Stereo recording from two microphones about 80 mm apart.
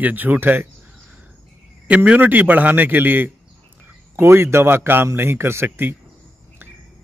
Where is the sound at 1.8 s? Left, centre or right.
Centre.